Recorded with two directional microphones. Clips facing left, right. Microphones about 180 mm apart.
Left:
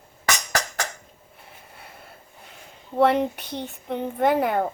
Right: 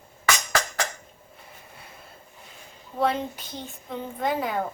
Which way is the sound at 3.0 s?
65° left (ahead or behind).